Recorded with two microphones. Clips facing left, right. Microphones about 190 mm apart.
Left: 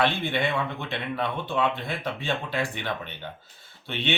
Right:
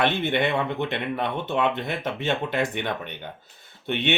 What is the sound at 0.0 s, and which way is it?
Speech, 20° right (ahead or behind).